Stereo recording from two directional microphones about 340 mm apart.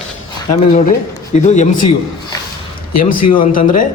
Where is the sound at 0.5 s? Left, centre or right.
Centre.